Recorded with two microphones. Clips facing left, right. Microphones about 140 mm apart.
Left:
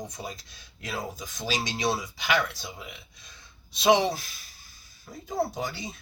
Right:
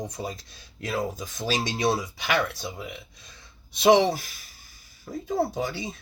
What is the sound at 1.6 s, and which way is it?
Speech, 55° right (ahead or behind).